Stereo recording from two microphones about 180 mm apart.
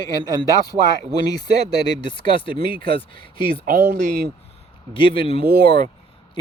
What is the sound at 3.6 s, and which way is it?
Speech, 55° right (ahead or behind).